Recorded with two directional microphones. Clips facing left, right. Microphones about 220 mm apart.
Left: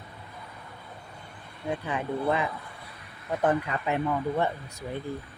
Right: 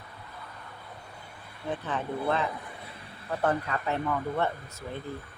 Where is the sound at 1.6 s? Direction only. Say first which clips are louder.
Left 2 dB; 10° left (ahead or behind).